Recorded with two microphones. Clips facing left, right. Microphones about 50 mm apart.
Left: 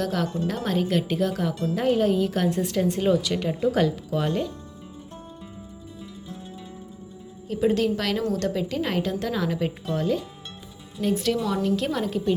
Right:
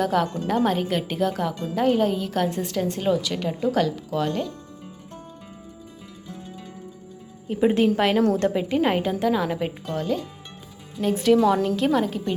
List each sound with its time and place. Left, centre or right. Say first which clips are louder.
0.0 s a woman's voice: right 3 dB; centre
7.4 s a woman's voice: right 3 dB; right
9.9 s a woman's voice: left 1 dB; centre
11.0 s a woman's voice: right 5 dB; centre
11.4 s speech: right 6 dB; right
11.8 s a woman's voice: right 4 dB; centre